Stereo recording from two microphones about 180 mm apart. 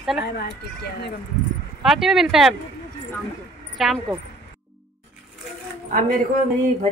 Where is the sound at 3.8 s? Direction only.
Centre (ahead or behind).